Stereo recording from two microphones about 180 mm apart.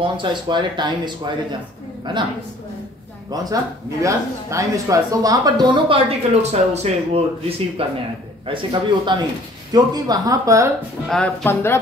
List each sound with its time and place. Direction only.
0.0 s speech: 25° right (ahead or behind)
4.0 s speech: 15° right (ahead or behind)
11.1 s speech: 5° left (ahead or behind)